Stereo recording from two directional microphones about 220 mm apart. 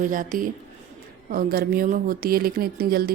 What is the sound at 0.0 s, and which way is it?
A woman's voice, 40° right (ahead or behind).